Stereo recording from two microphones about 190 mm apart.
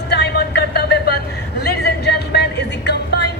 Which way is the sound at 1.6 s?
55° left (ahead or behind).